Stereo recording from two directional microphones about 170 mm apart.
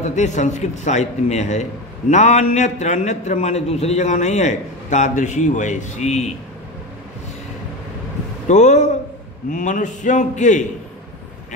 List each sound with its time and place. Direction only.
0.0 s a man's voice: 45° left (ahead or behind)
8.5 s a man's voice: 45° left (ahead or behind)